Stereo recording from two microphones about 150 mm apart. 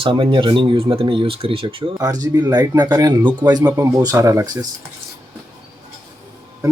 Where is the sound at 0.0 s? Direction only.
35° right (ahead or behind).